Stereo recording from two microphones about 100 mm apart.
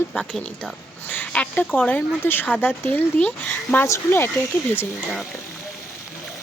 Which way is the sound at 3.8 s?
25° left (ahead or behind).